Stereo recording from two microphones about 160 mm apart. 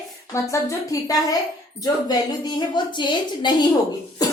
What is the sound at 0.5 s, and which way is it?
A woman's voice, 20° left (ahead or behind).